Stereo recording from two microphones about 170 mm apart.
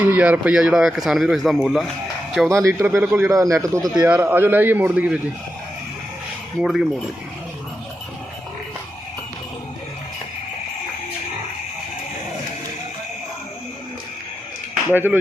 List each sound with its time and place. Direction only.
0.0 s speech: 10° right (ahead or behind)
2.5 s speech: 15° right (ahead or behind)
6.6 s speech: centre (ahead or behind)
14.8 s speech: 10° right (ahead or behind)